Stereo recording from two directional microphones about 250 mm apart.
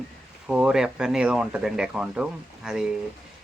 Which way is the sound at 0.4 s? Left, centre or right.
Centre.